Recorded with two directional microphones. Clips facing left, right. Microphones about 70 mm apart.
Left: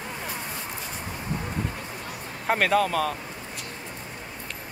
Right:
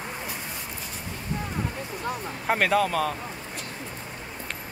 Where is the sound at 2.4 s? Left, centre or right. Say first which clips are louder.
Left 1 dB; centre.